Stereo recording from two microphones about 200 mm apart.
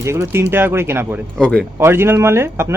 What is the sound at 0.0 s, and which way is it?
Speech, 15° right (ahead or behind).